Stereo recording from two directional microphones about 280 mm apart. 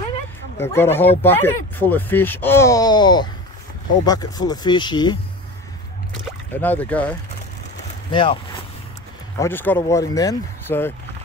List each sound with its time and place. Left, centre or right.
0.6 s speech: centre
6.5 s speech: centre
8.1 s speech: centre
9.4 s speech: centre